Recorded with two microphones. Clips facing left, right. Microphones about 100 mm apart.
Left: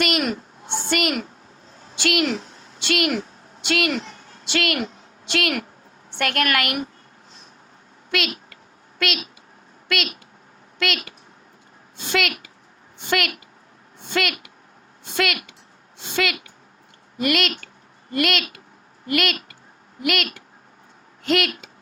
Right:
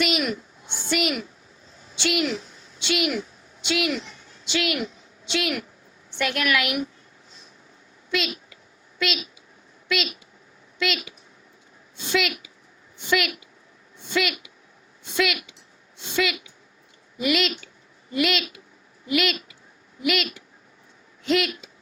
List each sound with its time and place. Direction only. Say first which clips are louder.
0.0 s a sound: left 2 dB; 55° left (ahead or behind)
5.3 s a woman's voice: left 3 dB; 60° left (ahead or behind)
8.1 s a child's voice: left 1 dB; 65° left (ahead or behind)